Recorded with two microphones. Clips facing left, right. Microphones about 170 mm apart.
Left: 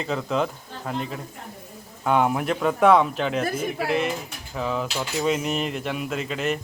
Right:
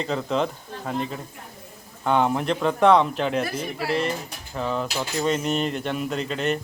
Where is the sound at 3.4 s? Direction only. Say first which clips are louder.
Left 3 dB; 50° left (ahead or behind).